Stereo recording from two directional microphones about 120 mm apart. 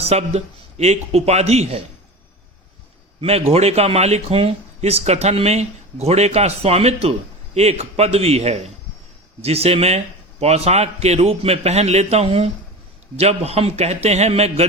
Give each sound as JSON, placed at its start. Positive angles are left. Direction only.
{"t": 0.0, "sound": "speech", "side_deg": -60}
{"t": 3.2, "sound": "a man's voice", "side_deg": -60}